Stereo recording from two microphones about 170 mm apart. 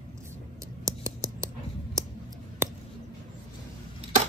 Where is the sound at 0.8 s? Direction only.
20° right (ahead or behind).